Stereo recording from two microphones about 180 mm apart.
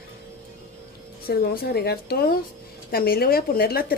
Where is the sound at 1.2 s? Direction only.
55° left (ahead or behind).